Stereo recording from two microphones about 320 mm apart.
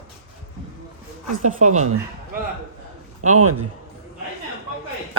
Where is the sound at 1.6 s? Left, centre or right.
Right.